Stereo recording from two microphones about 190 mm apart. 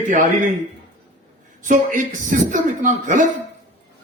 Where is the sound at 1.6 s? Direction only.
45° right (ahead or behind).